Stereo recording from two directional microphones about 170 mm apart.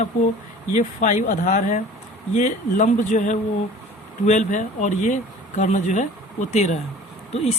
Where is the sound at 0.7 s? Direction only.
50° left (ahead or behind).